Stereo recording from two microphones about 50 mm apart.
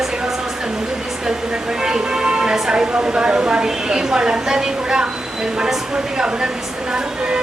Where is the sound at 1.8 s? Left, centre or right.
Centre.